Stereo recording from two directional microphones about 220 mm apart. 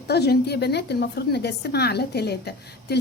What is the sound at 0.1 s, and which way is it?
A woman's voice, 45° left (ahead or behind).